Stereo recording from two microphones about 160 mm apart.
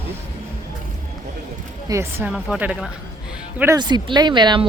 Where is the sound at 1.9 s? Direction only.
15° right (ahead or behind).